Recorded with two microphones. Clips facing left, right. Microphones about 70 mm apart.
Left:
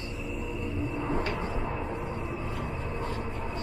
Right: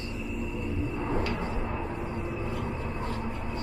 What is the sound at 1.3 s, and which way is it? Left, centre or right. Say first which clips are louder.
Vehicle: even; centre.